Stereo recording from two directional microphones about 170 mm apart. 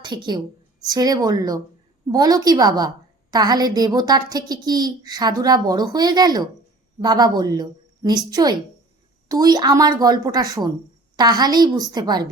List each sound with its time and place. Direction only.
0.0 s a woman's voice: 25° right (ahead or behind)